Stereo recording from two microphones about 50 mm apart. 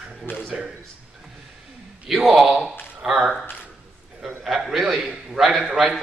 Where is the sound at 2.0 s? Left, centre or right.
Centre.